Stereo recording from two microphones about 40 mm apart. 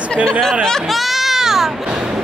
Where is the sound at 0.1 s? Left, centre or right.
Centre.